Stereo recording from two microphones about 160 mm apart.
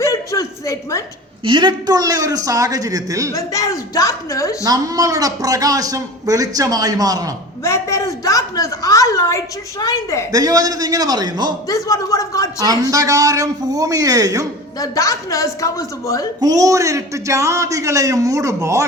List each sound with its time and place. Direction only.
0.0 s a sound: 20° left (ahead or behind)
1.5 s a man's voice: 30° right (ahead or behind)
3.3 s a woman's voice: 20° left (ahead or behind)
4.6 s a man's voice: 20° right (ahead or behind)
7.6 s a woman's voice: 20° left (ahead or behind)
10.3 s a man's voice: 20° right (ahead or behind)
11.7 s a woman's voice: 20° left (ahead or behind)
12.5 s a man's voice: 25° right (ahead or behind)
14.8 s a woman's voice: 20° left (ahead or behind)
16.4 s a man's voice: 20° right (ahead or behind)